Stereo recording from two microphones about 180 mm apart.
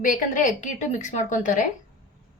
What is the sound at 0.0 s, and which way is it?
A woman's voice, 50° left (ahead or behind).